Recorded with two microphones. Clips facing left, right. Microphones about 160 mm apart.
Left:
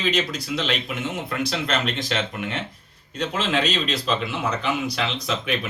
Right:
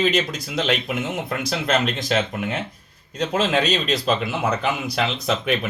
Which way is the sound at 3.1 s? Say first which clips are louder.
Right 5 dB; 40° right (ahead or behind).